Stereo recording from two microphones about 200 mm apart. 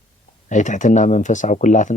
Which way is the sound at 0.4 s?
40° left (ahead or behind).